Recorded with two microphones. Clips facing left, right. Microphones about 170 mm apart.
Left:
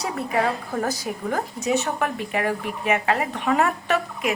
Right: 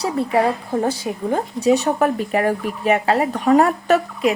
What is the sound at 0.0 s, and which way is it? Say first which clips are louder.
A woman's voice: right 5 dB; 30° right (ahead or behind).